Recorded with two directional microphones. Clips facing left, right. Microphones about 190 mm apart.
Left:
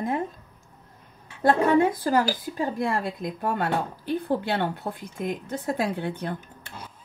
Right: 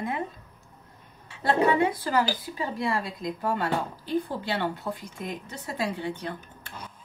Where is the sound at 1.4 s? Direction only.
50° left (ahead or behind).